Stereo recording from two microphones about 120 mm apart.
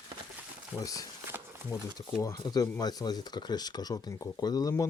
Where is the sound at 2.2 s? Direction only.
30° left (ahead or behind).